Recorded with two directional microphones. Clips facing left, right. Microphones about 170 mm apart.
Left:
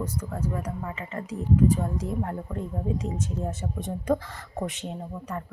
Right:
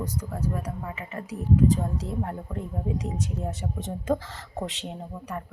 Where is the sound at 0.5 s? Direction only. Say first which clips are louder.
Left 1 dB; 15° right (ahead or behind).